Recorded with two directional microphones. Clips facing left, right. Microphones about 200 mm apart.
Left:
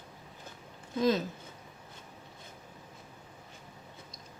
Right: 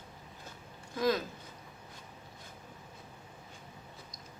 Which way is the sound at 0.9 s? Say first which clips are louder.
Left 3 dB; 25° left (ahead or behind).